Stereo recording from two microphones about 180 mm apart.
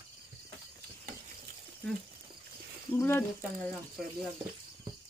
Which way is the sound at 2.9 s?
10° left (ahead or behind).